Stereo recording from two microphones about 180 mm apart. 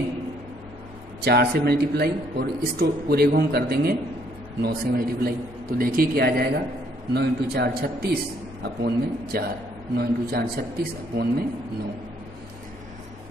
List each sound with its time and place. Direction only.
1.2 s a man's voice: 60° right (ahead or behind)